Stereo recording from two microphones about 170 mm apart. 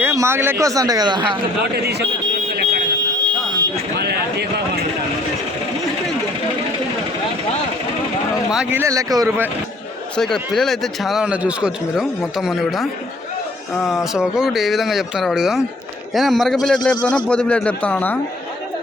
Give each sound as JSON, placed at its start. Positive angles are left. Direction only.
{"t": 0.0, "sound": "speech", "side_deg": -15}
{"t": 1.7, "sound": "speech", "side_deg": -75}
{"t": 3.9, "sound": "speech", "side_deg": -75}
{"t": 8.5, "sound": "speech", "side_deg": -15}
{"t": 10.3, "sound": "a man's voice", "side_deg": 0}